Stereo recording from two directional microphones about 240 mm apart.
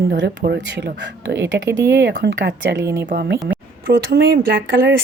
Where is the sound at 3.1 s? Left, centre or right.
Right.